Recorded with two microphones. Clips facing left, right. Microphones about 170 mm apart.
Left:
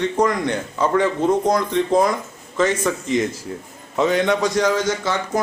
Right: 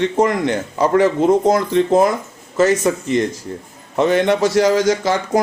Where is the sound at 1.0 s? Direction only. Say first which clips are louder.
Right 5 dB; 10° right (ahead or behind).